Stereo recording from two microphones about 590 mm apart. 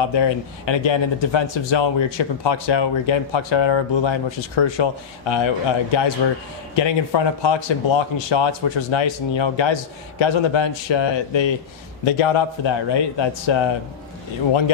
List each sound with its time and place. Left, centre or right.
0.1 s speech: left